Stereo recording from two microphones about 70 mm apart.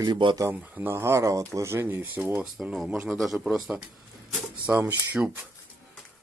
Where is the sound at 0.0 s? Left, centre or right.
Right.